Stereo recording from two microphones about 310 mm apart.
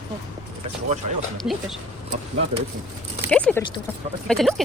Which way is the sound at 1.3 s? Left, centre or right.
Centre.